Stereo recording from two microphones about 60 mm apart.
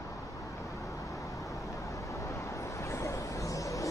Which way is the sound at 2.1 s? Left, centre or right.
Left.